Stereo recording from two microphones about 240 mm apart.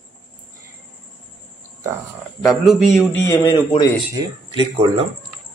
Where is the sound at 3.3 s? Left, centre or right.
Centre.